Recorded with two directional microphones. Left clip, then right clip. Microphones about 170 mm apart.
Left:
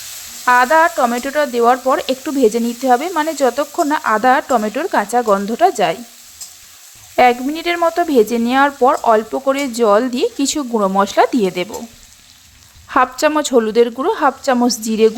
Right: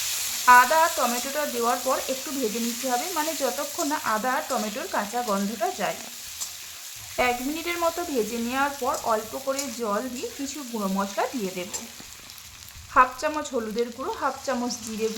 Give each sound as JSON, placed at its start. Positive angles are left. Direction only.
{"t": 0.4, "sound": "speech", "side_deg": 45}
{"t": 7.2, "sound": "speech", "side_deg": 45}
{"t": 12.9, "sound": "speech", "side_deg": 55}